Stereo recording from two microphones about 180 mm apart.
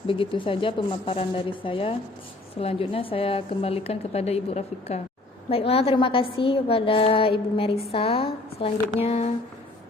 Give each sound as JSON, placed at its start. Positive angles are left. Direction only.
{"t": 0.1, "sound": "a woman's voice", "side_deg": 30}